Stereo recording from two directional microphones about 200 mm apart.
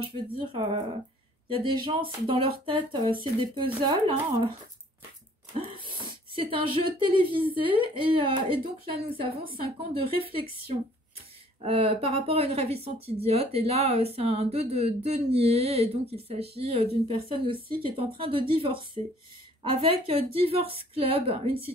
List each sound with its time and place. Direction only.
0.0 s speech: 25° right (ahead or behind)
5.6 s a sound: 25° right (ahead or behind)
7.1 s speech: 25° right (ahead or behind)
11.6 s speech: 30° right (ahead or behind)